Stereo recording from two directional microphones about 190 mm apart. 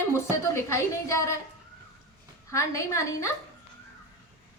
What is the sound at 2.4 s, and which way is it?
Speech, 15° left (ahead or behind).